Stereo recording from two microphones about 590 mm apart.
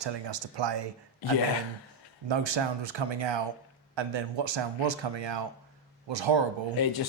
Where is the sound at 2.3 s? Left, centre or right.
Right.